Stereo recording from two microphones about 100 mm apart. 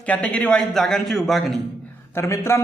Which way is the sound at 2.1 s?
25° left (ahead or behind).